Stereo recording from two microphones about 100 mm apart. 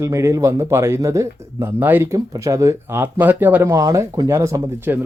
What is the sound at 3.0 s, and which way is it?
Speech, 20° right (ahead or behind).